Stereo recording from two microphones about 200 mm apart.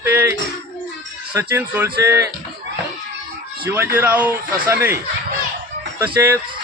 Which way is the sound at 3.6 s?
10° right (ahead or behind).